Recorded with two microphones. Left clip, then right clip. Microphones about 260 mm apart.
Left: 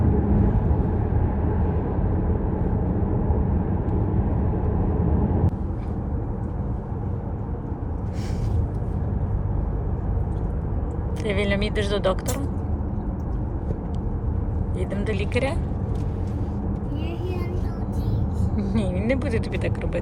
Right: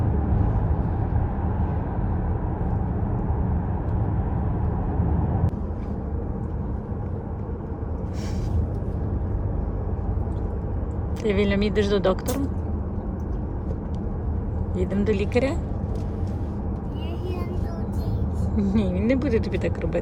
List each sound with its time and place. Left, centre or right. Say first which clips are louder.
11.2 s speech: right 2 dB; centre
14.8 s speech: right 4 dB; centre
18.7 s speech: right 1 dB; centre